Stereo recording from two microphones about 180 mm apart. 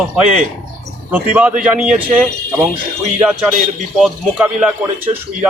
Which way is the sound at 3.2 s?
5° right (ahead or behind).